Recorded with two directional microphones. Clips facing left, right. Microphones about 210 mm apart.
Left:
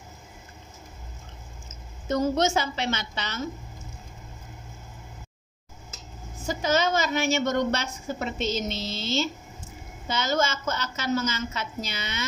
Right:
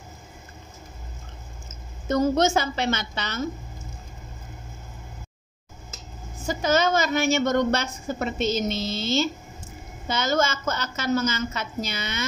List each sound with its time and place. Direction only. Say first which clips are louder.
2.0 s a woman's voice: right 3 dB; 50° right (ahead or behind)
6.4 s a woman's voice: right 2 dB; 50° right (ahead or behind)